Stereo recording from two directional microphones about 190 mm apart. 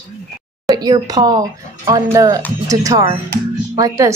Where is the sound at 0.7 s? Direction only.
20° right (ahead or behind).